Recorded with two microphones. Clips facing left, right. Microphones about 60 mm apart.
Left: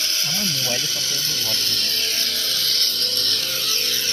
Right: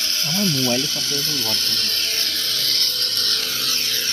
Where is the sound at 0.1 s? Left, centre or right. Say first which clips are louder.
Right 4 dB; right.